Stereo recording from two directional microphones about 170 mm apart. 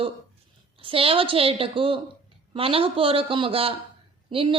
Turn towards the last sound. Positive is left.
turn(degrees=-30)  # may be behind; listen again after turning